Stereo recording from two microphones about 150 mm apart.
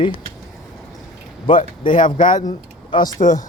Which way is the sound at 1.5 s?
35° left (ahead or behind).